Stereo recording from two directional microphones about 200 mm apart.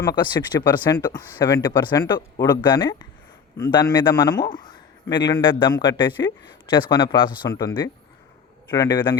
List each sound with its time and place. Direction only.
0.0 s speech: 20° left (ahead or behind)